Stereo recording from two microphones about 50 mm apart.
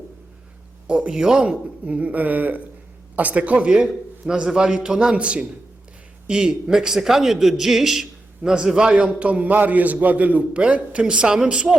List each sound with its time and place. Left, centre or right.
0.9 s a man's voice: centre
1.4 s a man's voice: right
3.8 s a man's voice: centre
9.0 s a man's voice: right